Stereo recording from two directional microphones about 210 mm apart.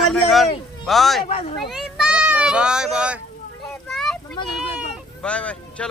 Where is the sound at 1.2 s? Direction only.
25° left (ahead or behind).